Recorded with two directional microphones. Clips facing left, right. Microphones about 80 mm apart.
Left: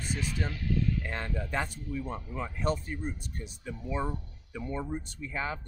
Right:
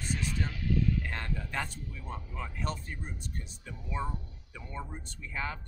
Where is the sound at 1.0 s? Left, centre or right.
Centre.